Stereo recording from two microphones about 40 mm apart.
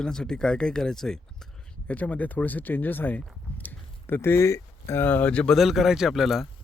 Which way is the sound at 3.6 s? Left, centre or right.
Left.